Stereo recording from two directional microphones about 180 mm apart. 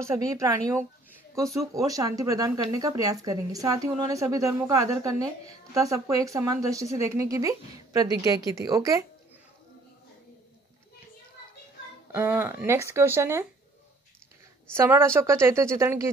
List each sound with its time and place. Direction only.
0.0 s speech: 15° right (ahead or behind)
12.1 s speech: 10° right (ahead or behind)
14.7 s speech: 15° right (ahead or behind)